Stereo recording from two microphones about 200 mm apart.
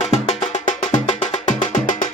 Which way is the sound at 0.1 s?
35° left (ahead or behind).